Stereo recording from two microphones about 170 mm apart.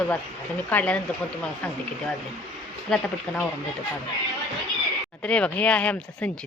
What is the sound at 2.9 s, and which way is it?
Speech, 5° left (ahead or behind).